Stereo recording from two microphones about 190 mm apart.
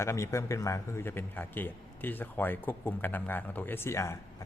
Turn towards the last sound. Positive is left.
turn(degrees=15)  # may be behind; listen again after turning